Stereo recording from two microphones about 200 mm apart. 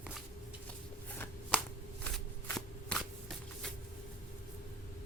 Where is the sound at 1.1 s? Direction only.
10° left (ahead or behind).